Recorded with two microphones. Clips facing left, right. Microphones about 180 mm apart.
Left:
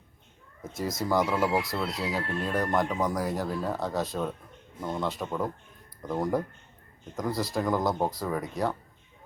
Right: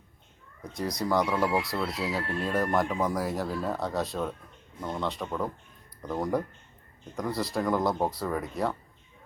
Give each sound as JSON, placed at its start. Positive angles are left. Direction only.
{"t": 0.7, "sound": "speech", "side_deg": 0}